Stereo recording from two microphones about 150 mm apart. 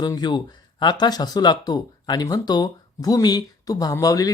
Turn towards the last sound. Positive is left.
turn(degrees=25)  # may be behind; listen again after turning